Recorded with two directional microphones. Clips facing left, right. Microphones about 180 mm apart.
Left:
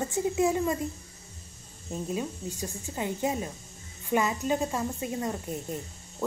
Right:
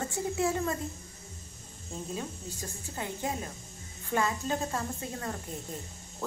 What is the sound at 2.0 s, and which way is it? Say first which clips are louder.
A woman's voice: left 5 dB; 15° left (ahead or behind).